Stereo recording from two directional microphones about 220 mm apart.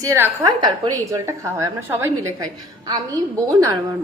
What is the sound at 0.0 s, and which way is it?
A woman's voice, 15° right (ahead or behind).